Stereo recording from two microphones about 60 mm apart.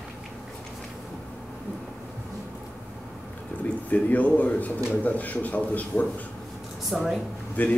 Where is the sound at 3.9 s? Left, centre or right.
Left.